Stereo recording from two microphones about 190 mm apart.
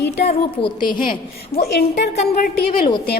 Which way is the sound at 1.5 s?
60° left (ahead or behind).